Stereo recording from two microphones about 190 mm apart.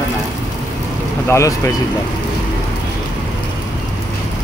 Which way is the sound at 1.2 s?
15° left (ahead or behind).